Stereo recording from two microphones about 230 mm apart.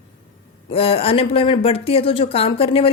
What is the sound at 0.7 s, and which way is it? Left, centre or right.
Speech, left.